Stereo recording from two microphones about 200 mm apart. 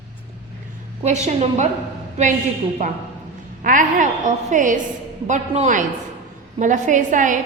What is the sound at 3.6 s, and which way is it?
A woman's voice, 40° right (ahead or behind).